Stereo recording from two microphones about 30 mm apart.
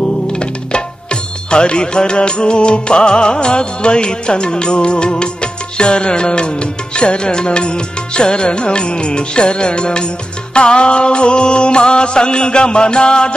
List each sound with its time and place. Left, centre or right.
0.3 s music: left